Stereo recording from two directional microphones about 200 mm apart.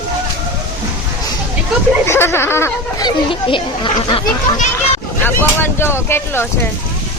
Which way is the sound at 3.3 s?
25° left (ahead or behind).